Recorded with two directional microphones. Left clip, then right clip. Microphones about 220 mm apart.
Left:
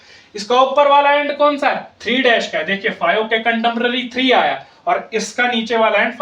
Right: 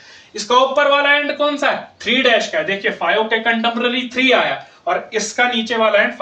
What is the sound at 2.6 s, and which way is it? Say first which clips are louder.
Speech: left 1 dB; 15° left (ahead or behind).